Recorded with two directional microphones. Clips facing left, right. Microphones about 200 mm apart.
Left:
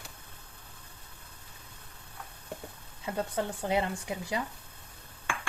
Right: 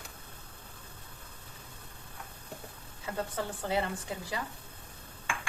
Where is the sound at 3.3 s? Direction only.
20° left (ahead or behind).